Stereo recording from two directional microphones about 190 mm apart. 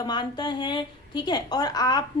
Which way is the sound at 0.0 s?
20° left (ahead or behind).